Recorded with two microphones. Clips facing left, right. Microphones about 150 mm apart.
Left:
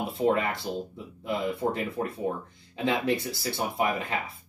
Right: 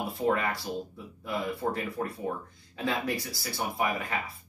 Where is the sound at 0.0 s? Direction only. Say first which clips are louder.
Left 3 dB; 20° left (ahead or behind).